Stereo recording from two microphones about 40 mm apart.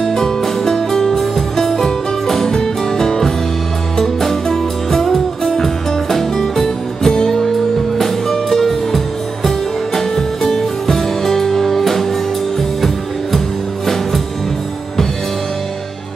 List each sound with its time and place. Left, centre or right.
0.0 s music: centre